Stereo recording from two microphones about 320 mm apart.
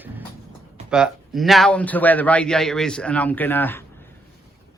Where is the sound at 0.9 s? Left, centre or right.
Centre.